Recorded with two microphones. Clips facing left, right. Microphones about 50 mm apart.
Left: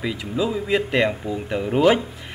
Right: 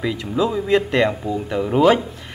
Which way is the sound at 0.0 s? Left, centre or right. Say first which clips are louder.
Right 3 dB; centre.